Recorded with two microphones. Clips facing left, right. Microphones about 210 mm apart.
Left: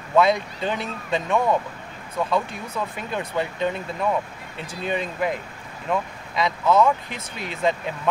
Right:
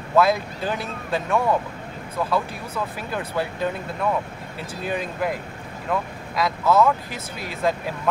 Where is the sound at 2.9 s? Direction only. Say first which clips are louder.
Left 1 dB; 5° right (ahead or behind).